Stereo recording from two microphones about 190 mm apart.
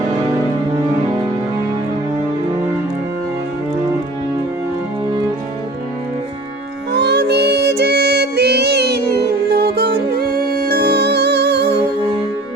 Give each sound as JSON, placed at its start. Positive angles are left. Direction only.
{"t": 6.9, "sound": "child singing", "side_deg": -60}
{"t": 9.5, "sound": "music", "side_deg": -55}